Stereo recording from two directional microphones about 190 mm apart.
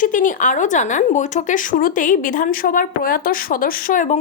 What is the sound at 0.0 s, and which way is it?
Speech, 45° left (ahead or behind).